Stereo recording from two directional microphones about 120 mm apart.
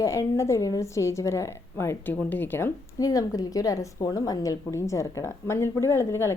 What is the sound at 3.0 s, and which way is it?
A woman's voice, 30° left (ahead or behind).